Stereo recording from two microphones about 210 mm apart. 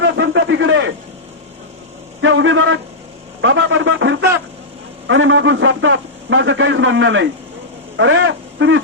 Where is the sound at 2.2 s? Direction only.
65° right (ahead or behind).